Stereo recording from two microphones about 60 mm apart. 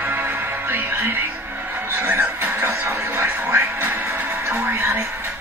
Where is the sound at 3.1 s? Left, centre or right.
Right.